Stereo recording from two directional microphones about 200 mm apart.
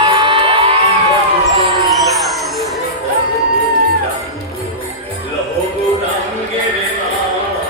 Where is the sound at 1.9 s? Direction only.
Centre (ahead or behind).